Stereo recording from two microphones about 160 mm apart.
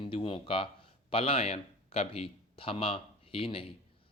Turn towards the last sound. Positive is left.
turn(degrees=35)  # may be behind; listen again after turning